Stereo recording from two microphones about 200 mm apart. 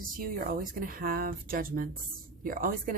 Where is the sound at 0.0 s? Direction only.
45° right (ahead or behind).